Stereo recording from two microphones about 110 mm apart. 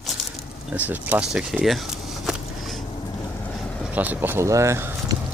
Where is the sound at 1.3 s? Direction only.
5° right (ahead or behind).